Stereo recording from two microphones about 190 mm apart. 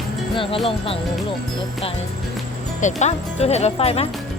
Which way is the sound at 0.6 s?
30° left (ahead or behind).